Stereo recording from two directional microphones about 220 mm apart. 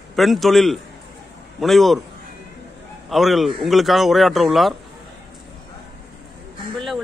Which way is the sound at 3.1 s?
Centre (ahead or behind).